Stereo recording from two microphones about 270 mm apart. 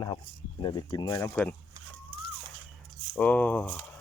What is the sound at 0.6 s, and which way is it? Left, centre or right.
Speech, centre.